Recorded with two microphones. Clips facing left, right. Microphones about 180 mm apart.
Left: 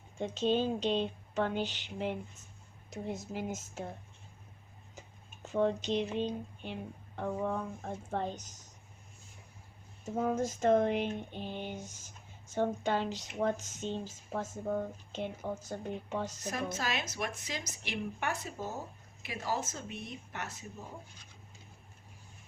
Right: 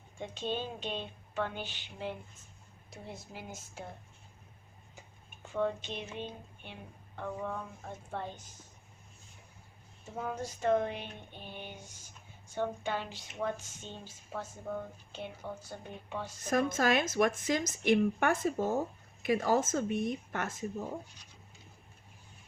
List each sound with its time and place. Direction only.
0.2 s speech: 40° left (ahead or behind)
2.9 s speech: 40° left (ahead or behind)
4.9 s tick-tock: 40° left (ahead or behind)
6.1 s speech: 35° left (ahead or behind)
10.2 s speech: 45° left (ahead or behind)
16.5 s a woman's voice: 50° right (ahead or behind)